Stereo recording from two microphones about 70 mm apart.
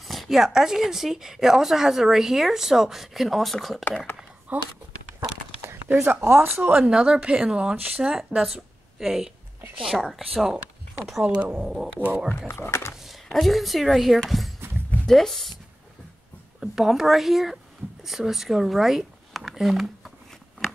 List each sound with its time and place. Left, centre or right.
0.0 s a woman's voice: centre
4.5 s speech: right
5.6 s speech: right
6.8 s speech: centre
7.7 s speech: right
8.0 s a woman's voice: centre
11.2 s speech: centre
11.6 s a woman's voice: centre
12.4 s speech: left
12.9 s a woman's voice: centre
16.5 s a woman's voice: centre